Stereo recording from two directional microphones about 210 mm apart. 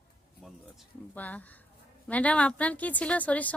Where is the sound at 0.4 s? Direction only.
5° left (ahead or behind).